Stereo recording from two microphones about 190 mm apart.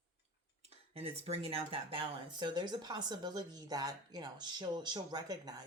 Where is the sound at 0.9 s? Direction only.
30° right (ahead or behind).